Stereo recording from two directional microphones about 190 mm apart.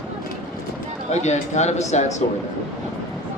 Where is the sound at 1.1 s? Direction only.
35° left (ahead or behind).